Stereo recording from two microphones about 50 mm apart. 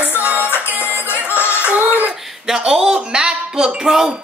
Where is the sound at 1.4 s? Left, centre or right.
Left.